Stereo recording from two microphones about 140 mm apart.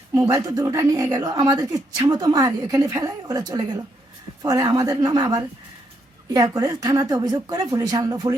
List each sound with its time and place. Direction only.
0.1 s speech: 25° right (ahead or behind)